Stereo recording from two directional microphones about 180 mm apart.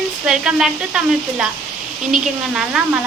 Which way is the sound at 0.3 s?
5° right (ahead or behind).